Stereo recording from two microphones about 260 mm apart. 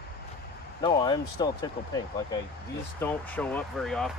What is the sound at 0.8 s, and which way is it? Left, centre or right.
Speech, centre.